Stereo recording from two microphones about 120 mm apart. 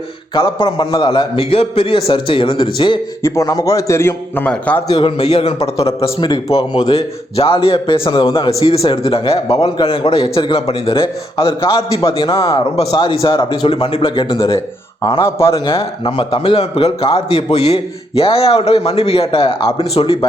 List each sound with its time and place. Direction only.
0.6 s a man's voice: 45° left (ahead or behind)
3.2 s a man's voice: 30° left (ahead or behind); by 4.8 s 10° left (ahead or behind)
4.9 s a man's voice: 50° left (ahead or behind)
10.2 s a man's voice: 55° left (ahead or behind)
12.9 s a man's voice: 40° left (ahead or behind)
15.2 s a man's voice: 20° left (ahead or behind)
15.5 s a man's voice: 45° left (ahead or behind)